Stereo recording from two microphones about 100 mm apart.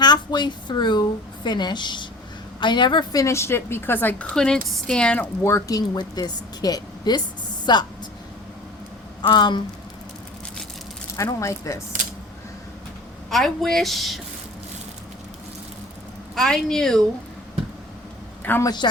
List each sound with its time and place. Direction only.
0.0 s a woman's voice: 45° left (ahead or behind); by 5.3 s 10° left (ahead or behind)
5.4 s a woman's voice: 25° left (ahead or behind); by 7.9 s 45° left (ahead or behind)
9.2 s a woman's voice: 50° left (ahead or behind)
11.2 s a woman's voice: 30° left (ahead or behind)
13.3 s speech: centre (ahead or behind)
16.3 s speech: 5° left (ahead or behind)
18.6 s a woman's voice: 45° left (ahead or behind)